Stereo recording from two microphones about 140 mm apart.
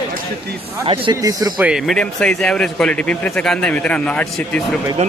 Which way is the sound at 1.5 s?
5° right (ahead or behind).